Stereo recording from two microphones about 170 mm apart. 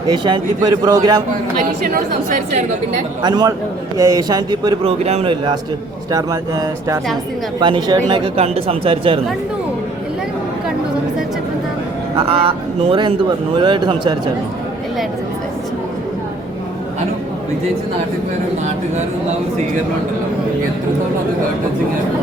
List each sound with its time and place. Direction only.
0.1 s a man's voice: 25° right (ahead or behind)
1.5 s a woman's voice: 50° right (ahead or behind)
3.2 s a man's voice: 25° right (ahead or behind)
6.1 s a man's voice: 20° right (ahead or behind)
12.1 s a man's voice: 35° right (ahead or behind)